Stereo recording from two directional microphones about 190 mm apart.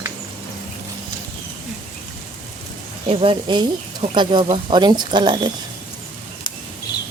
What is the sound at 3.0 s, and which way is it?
Speech, 30° right (ahead or behind).